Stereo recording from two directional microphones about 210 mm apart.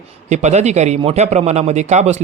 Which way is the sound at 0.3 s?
35° right (ahead or behind).